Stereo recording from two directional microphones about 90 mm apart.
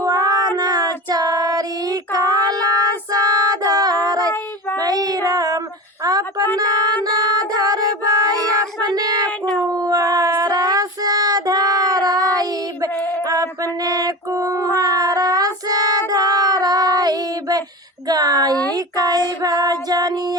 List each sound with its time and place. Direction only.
0.0 s child singing: 45° right (ahead or behind)
3.2 s a sound: 45° right (ahead or behind)
4.8 s child singing: 45° right (ahead or behind)
6.6 s music: 45° right (ahead or behind)
8.9 s child singing: 50° right (ahead or behind)
9.6 s dog: 45° right (ahead or behind)
13.2 s a sound: 40° right (ahead or behind)
19.4 s music: 45° right (ahead or behind)